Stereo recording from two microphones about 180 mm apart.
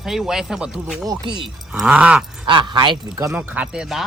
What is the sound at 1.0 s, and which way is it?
Speech, 25° right (ahead or behind).